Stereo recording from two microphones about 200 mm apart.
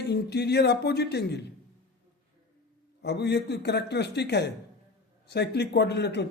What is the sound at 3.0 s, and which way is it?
Speech, 55° left (ahead or behind).